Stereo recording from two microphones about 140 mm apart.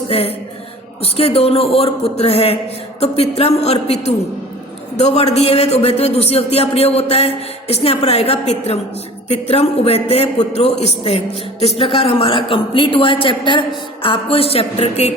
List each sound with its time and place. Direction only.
0.1 s a man's voice: 45° left (ahead or behind)